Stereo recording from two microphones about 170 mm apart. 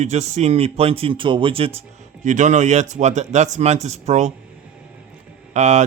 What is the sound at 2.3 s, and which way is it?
A man's voice, 45° right (ahead or behind).